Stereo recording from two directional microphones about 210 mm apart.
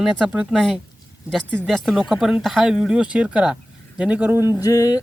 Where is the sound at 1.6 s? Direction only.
Centre (ahead or behind).